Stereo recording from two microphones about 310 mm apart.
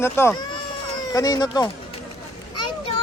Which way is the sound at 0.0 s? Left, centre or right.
Centre.